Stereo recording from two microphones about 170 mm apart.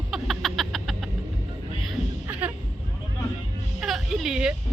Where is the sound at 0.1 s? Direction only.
Centre (ahead or behind).